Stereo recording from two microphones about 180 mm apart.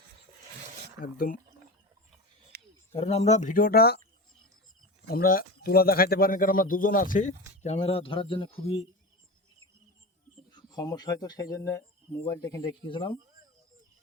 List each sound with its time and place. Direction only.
1.0 s speech: 50° left (ahead or behind)
2.5 s a sound: 65° right (ahead or behind)
2.9 s speech: 35° left (ahead or behind); by 4.0 s 60° left (ahead or behind)
5.0 s speech: 55° left (ahead or behind); by 8.9 s 30° left (ahead or behind)
10.5 s speech: 20° left (ahead or behind)